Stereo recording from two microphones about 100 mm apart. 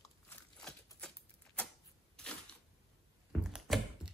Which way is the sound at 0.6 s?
5° left (ahead or behind).